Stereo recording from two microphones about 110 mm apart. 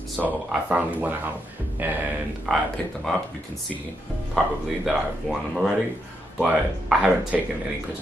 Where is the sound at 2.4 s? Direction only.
5° left (ahead or behind).